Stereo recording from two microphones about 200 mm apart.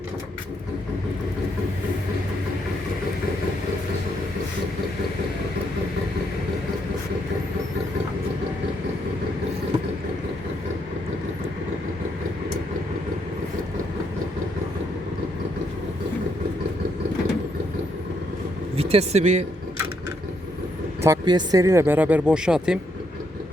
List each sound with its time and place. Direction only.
18.8 s speech: 30° right (ahead or behind)
21.0 s speech: 20° right (ahead or behind); by 22.8 s 5° right (ahead or behind)